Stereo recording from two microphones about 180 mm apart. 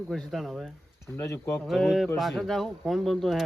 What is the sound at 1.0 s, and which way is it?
Speech, 15° left (ahead or behind).